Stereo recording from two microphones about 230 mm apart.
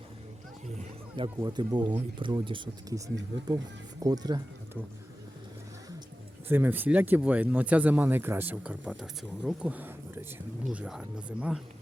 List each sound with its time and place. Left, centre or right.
1.1 s speech: centre
4.0 s speech: centre
6.5 s speech: centre